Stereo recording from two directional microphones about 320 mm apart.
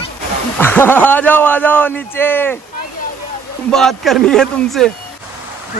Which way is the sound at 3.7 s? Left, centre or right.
Centre.